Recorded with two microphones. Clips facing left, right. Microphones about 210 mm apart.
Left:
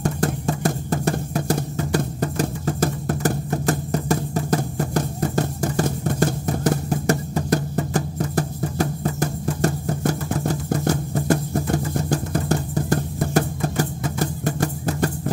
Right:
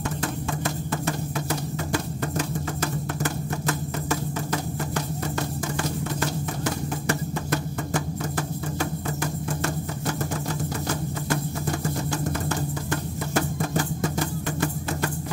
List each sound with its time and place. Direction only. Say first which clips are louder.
0.0 s drum: left 6 dB; 40° left (ahead or behind)
10.4 s music: left 7 dB; 40° left (ahead or behind)